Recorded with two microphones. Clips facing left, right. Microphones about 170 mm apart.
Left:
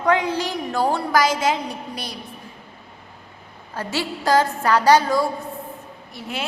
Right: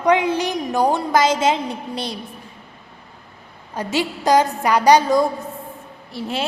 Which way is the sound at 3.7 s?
15° right (ahead or behind).